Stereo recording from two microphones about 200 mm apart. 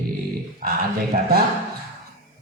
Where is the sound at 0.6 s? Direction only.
50° right (ahead or behind).